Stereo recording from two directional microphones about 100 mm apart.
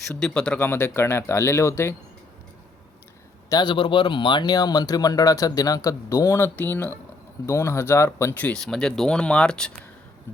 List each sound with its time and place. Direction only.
0.2 s speech: 10° left (ahead or behind)
0.6 s speech: 25° left (ahead or behind)
3.5 s speech: 50° left (ahead or behind); by 8.5 s 20° left (ahead or behind)
8.5 s speech: 5° left (ahead or behind)